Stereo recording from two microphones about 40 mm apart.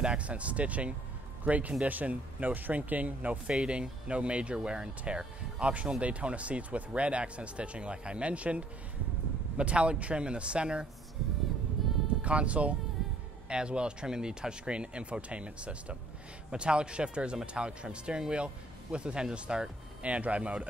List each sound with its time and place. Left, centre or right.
0.0 s speech: right
12.2 s speech: right